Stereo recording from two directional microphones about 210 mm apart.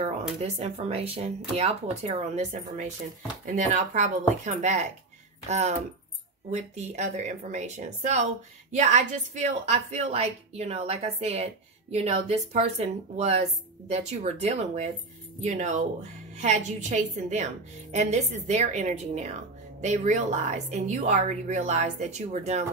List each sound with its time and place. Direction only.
0.4 s a woman's voice: 30° right (ahead or behind)